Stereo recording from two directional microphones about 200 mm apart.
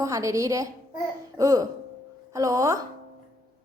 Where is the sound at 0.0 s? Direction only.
15° right (ahead or behind).